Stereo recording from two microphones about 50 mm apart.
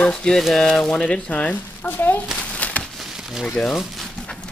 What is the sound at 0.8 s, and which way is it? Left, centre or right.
Speech, centre.